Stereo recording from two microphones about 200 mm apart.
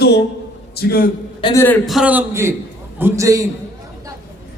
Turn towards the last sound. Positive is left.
turn(degrees=-15)  # may be behind; listen again after turning